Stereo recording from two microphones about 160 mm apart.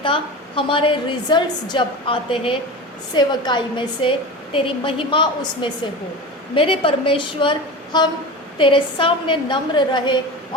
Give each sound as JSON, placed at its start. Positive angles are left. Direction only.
{"t": 0.0, "sound": "a woman's voice", "side_deg": 30}